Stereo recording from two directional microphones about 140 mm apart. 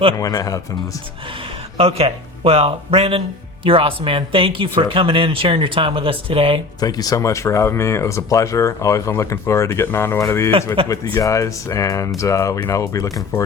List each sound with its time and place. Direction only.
0.2 s speech: 25° left (ahead or behind)
1.8 s speech: 45° right (ahead or behind)
6.7 s speech: 30° left (ahead or behind)